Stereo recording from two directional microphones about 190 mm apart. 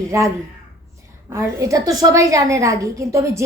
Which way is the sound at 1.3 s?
15° right (ahead or behind).